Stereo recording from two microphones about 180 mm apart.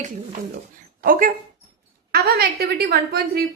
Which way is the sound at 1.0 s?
50° right (ahead or behind).